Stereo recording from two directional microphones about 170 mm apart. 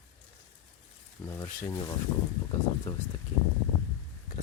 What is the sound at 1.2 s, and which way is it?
Speech, 15° left (ahead or behind).